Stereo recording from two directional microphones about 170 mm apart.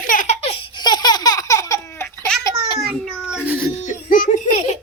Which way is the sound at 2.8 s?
5° right (ahead or behind).